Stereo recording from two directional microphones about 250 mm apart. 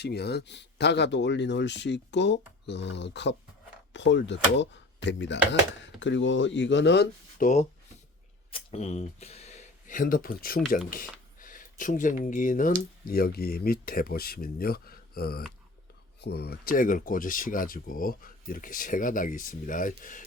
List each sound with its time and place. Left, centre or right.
0.0 s speech: left